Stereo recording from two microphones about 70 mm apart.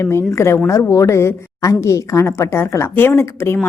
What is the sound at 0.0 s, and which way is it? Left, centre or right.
A woman's voice, left.